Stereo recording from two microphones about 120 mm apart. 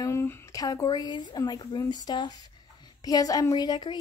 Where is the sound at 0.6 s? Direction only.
30° left (ahead or behind).